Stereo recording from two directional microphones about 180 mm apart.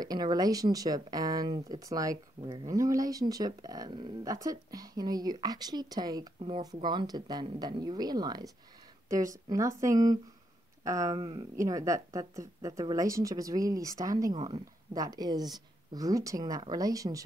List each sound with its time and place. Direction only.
0.0 s speech: 20° right (ahead or behind)